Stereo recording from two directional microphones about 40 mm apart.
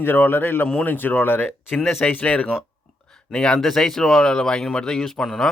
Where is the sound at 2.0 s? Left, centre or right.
Left.